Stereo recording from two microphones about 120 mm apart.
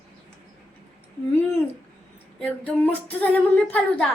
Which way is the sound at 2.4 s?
10° left (ahead or behind).